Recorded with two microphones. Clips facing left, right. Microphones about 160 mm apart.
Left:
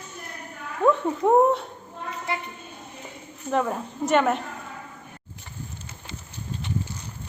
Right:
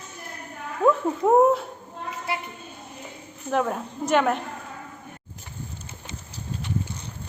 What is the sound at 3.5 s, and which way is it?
Speech, centre (ahead or behind).